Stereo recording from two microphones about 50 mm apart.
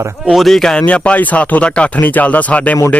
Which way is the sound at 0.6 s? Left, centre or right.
Centre.